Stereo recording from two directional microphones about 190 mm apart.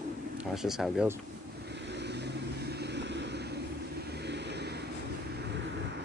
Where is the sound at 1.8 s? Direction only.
65° right (ahead or behind).